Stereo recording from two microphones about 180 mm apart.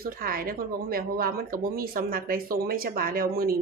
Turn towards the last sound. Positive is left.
turn(degrees=-55)  # may be behind; listen again after turning